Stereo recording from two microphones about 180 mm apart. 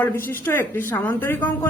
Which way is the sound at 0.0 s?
10° left (ahead or behind).